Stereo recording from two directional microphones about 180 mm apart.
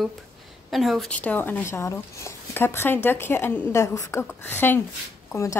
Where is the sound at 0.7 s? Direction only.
Centre (ahead or behind).